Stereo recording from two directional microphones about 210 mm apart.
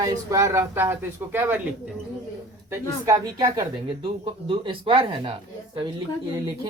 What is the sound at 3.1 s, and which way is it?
Speech, 15° right (ahead or behind).